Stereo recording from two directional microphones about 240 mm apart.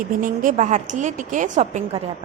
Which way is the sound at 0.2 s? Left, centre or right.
Right.